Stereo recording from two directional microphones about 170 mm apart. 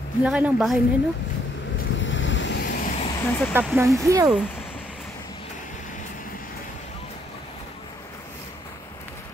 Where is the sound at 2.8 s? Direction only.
45° left (ahead or behind).